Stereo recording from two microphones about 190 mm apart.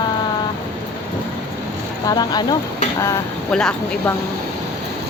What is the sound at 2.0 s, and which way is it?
Speech, 20° left (ahead or behind).